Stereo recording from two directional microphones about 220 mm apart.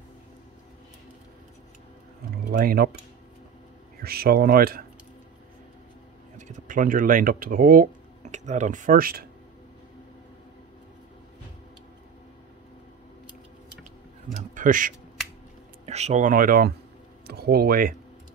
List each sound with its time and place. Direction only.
2.5 s speech: 45° right (ahead or behind)
4.0 s speech: 45° right (ahead or behind)
6.3 s speech: 35° right (ahead or behind)
14.5 s speech: 35° right (ahead or behind)